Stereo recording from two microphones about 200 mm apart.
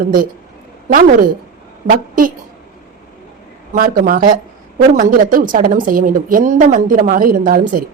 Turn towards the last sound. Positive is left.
turn(degrees=-45)  # may be behind; listen again after turning